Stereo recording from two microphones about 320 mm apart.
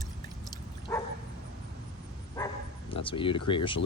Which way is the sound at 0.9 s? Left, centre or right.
Centre.